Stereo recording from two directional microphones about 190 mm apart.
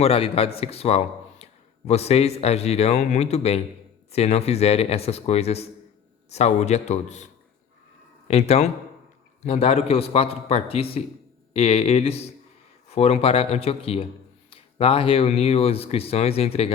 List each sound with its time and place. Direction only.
0.0 s speech: 30° left (ahead or behind)
8.3 s speech: 35° left (ahead or behind)